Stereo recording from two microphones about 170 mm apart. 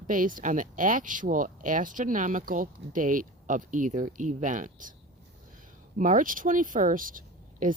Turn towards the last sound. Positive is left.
turn(degrees=-50)  # may be behind; listen again after turning